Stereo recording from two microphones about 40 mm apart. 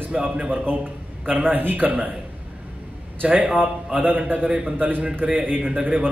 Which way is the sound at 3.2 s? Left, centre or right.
Right.